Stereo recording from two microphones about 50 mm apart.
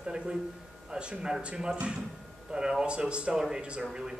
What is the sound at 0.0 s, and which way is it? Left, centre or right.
A man's voice, centre.